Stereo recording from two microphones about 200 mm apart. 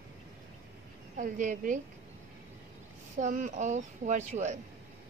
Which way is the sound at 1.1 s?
40° right (ahead or behind).